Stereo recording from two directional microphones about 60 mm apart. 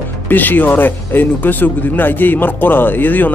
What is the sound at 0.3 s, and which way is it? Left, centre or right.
Speech, left.